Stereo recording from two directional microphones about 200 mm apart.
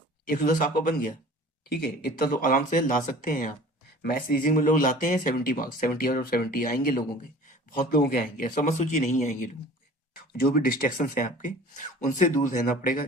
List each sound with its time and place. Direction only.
0.3 s speech: 45° left (ahead or behind)